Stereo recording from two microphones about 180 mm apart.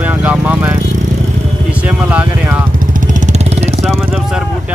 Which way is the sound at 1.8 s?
10° right (ahead or behind).